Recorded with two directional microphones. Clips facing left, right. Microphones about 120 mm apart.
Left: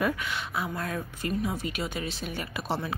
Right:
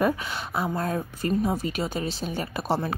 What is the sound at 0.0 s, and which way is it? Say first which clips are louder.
A woman's voice: right 4 dB; 35° right (ahead or behind).